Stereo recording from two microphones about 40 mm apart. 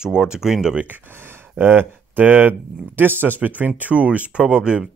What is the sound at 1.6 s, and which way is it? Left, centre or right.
Speech, right.